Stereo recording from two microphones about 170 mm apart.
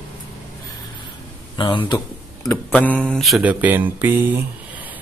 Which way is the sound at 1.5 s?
30° left (ahead or behind).